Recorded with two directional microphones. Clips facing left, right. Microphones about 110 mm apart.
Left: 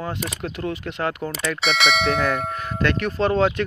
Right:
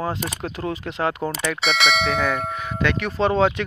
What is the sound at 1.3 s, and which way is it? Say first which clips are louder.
Speech: even; centre (ahead or behind).